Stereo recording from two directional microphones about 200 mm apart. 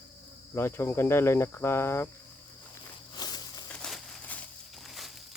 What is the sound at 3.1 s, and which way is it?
Snake, 20° left (ahead or behind).